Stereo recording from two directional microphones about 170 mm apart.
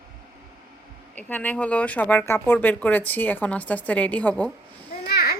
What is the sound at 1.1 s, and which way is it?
Speech, 10° left (ahead or behind).